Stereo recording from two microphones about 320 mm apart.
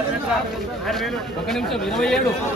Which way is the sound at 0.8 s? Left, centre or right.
Centre.